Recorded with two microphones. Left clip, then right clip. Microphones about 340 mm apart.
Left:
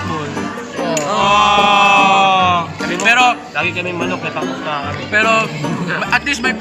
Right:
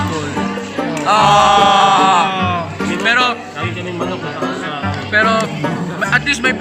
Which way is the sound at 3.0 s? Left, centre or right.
Centre.